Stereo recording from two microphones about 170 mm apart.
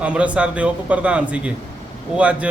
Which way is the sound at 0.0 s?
5° right (ahead or behind).